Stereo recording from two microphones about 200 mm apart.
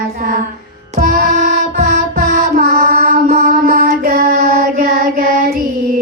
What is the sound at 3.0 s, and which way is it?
Child singing, 35° right (ahead or behind).